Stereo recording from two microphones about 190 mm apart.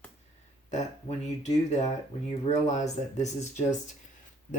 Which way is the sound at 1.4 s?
35° left (ahead or behind).